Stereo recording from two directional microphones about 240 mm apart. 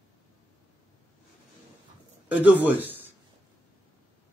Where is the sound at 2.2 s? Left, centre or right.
Centre.